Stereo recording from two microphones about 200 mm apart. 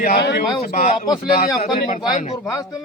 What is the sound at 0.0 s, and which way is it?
Speech, 55° left (ahead or behind).